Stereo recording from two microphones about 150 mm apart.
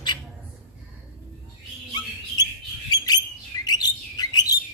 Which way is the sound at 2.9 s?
25° left (ahead or behind).